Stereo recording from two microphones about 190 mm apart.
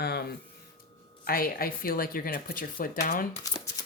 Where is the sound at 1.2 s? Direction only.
50° left (ahead or behind).